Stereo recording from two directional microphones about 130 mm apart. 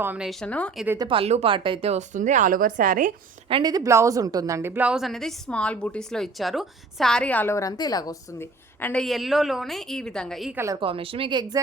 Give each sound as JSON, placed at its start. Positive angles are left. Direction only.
{"t": 0.0, "sound": "speech", "side_deg": -15}
{"t": 0.3, "sound": "speech", "side_deg": 5}
{"t": 1.0, "sound": "a woman's voice", "side_deg": -40}
{"t": 3.5, "sound": "a woman's voice", "side_deg": -30}
{"t": 7.5, "sound": "a woman's voice", "side_deg": 30}
{"t": 8.4, "sound": "a woman's voice", "side_deg": 15}
{"t": 10.5, "sound": "speech", "side_deg": -20}
{"t": 10.8, "sound": "speech", "side_deg": -45}